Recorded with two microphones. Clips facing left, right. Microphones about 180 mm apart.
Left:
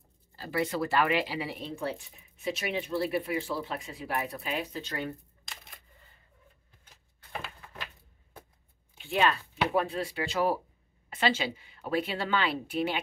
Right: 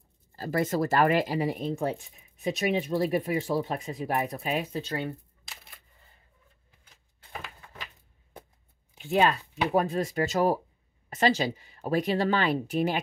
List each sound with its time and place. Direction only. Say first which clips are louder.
0.4 s speech: right 4 dB; 45° right (ahead or behind)
9.0 s speech: right 3 dB; 40° right (ahead or behind)